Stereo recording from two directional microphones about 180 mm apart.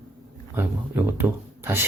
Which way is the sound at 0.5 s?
10° right (ahead or behind).